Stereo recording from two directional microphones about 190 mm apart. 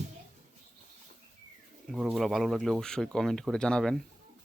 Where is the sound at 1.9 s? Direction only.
Centre (ahead or behind).